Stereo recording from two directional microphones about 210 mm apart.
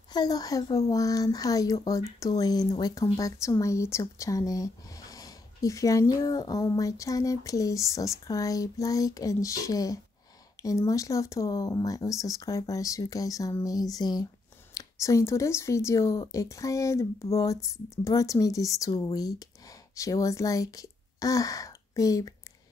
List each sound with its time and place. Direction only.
0.1 s speech: 20° left (ahead or behind)